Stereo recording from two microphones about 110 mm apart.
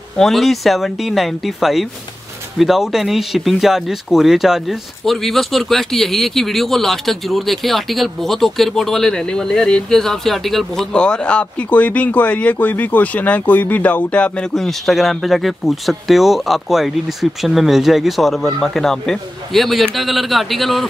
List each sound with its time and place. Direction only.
0.2 s speech: centre (ahead or behind)